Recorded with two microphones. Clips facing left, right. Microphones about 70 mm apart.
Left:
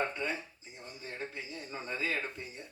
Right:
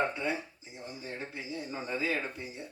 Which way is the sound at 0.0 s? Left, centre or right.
Centre.